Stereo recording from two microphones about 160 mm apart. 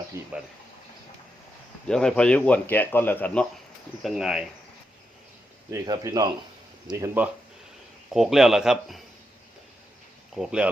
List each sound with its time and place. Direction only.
0.1 s speech: 15° right (ahead or behind)
1.9 s a man's voice: 5° left (ahead or behind)
4.0 s speech: centre (ahead or behind)
5.7 s speech: 25° right (ahead or behind)
8.1 s speech: centre (ahead or behind)
10.3 s speech: 5° right (ahead or behind)